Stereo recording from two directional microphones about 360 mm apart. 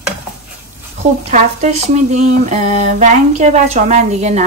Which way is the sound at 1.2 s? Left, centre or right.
Centre.